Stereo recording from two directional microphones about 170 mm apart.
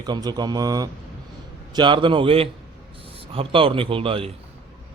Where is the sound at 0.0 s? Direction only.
25° right (ahead or behind).